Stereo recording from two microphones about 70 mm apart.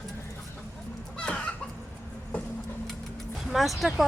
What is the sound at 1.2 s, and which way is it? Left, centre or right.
Chicken, centre.